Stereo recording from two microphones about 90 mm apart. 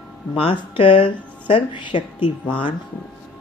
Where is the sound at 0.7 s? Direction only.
90° left.